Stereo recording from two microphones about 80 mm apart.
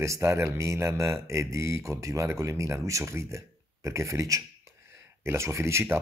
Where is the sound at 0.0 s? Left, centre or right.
Right.